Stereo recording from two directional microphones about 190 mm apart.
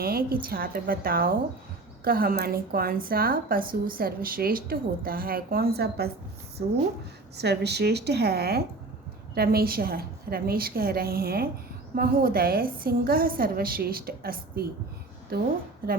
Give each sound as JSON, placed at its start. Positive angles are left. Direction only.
{"t": 0.0, "sound": "a woman's voice", "side_deg": -50}